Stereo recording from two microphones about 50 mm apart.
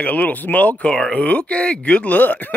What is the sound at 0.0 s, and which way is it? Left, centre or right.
Speech, left.